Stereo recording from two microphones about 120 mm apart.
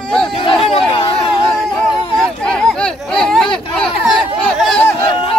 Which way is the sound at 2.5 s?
5° left (ahead or behind).